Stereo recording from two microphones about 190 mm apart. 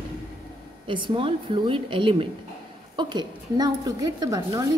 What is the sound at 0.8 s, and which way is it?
A woman's voice, 25° right (ahead or behind).